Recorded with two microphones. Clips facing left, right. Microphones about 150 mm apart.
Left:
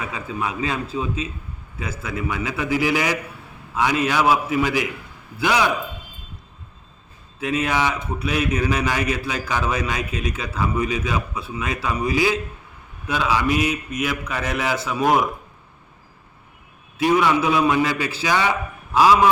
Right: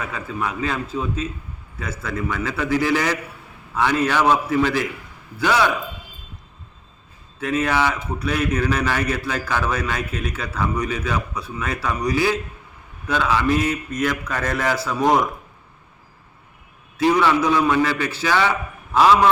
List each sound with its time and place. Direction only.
0.0 s a man's voice: 15° left (ahead or behind)
7.4 s a man's voice: 15° left (ahead or behind)
17.0 s a man's voice: 10° left (ahead or behind)